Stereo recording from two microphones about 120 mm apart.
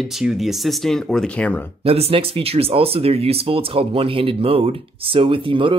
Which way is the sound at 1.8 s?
55° right (ahead or behind).